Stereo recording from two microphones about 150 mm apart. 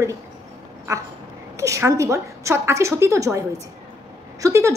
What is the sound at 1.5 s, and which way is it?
A woman's voice, 20° right (ahead or behind).